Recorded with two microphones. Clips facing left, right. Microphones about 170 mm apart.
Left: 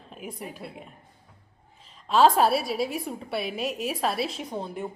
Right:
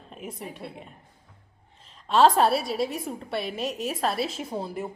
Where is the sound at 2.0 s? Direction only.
Centre (ahead or behind).